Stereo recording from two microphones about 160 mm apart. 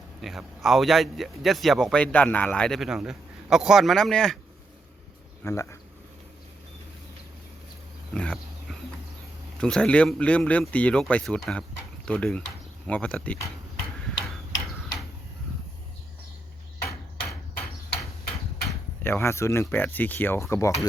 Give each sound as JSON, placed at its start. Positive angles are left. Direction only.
{"t": 0.2, "sound": "a man's voice", "side_deg": 0}
{"t": 5.4, "sound": "speech", "side_deg": 15}
{"t": 8.1, "sound": "dog", "side_deg": 5}
{"t": 9.6, "sound": "a man's voice", "side_deg": 5}
{"t": 19.0, "sound": "speech", "side_deg": 15}